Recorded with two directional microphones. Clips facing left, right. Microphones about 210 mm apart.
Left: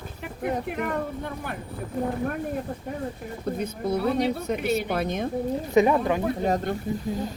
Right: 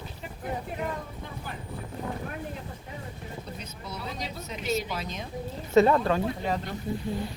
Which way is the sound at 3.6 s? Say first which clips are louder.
Left 13 dB; 55° left (ahead or behind).